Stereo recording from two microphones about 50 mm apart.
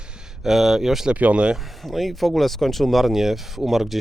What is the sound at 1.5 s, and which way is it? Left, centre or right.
Speech, centre.